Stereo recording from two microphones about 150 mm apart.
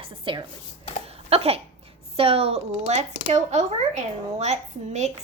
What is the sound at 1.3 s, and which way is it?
Cough, 40° right (ahead or behind).